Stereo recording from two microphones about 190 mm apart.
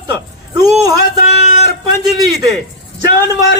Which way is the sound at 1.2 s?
35° left (ahead or behind).